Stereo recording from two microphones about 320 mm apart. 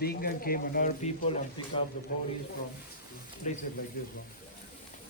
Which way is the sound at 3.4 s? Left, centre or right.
Left.